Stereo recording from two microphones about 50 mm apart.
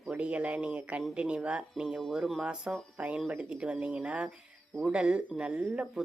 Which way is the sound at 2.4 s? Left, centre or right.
Right.